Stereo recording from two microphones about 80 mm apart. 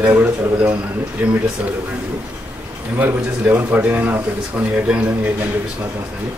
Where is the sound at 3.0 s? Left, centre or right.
Right.